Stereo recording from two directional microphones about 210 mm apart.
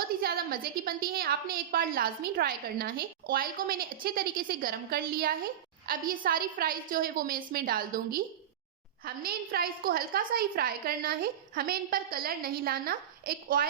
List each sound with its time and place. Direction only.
0.2 s a woman's voice: 45° right (ahead or behind)